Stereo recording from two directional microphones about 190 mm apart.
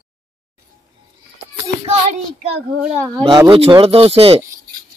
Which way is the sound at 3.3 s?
20° right (ahead or behind).